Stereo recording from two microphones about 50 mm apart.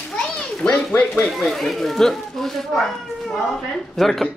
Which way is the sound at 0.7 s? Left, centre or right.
Left.